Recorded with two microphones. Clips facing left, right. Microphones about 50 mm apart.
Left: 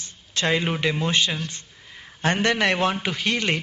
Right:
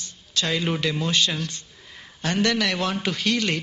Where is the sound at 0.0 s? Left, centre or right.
Left.